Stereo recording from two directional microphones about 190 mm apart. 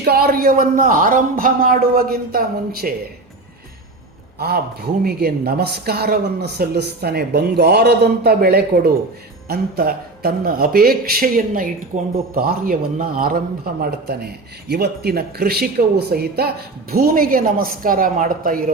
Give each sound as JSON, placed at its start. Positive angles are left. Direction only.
{"t": 0.0, "sound": "speech", "side_deg": -55}
{"t": 4.4, "sound": "a man's voice", "side_deg": -55}